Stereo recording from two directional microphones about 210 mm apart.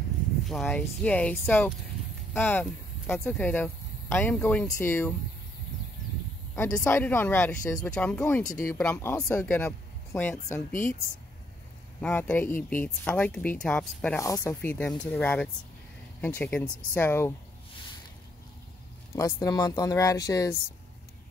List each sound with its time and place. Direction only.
0.5 s speech: centre (ahead or behind)
6.5 s speech: 15° left (ahead or behind)
12.0 s speech: 5° left (ahead or behind)
19.1 s speech: 15° left (ahead or behind)